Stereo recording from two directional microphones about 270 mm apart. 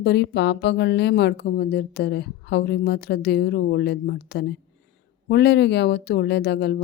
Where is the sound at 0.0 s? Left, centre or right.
Left.